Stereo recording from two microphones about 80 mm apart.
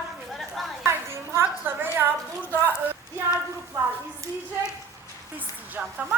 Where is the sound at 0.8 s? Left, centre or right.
Right.